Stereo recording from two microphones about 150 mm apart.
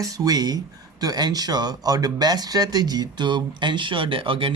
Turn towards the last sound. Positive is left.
turn(degrees=-35)  # may be behind; listen again after turning